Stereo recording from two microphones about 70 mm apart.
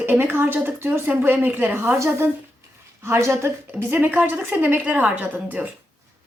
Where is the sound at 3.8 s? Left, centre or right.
Right.